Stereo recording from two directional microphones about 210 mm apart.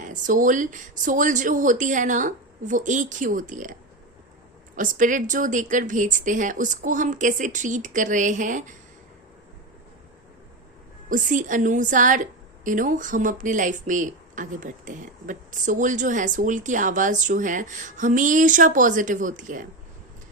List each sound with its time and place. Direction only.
0.0 s a woman's voice: 40° right (ahead or behind)
4.8 s a woman's voice: 40° right (ahead or behind)
11.1 s a woman's voice: 40° right (ahead or behind)